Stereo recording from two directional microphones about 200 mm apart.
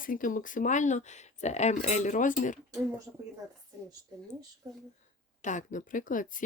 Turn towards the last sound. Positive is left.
turn(degrees=40)  # may be behind; listen again after turning